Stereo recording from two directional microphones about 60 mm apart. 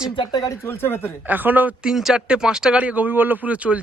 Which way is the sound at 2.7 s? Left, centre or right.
Right.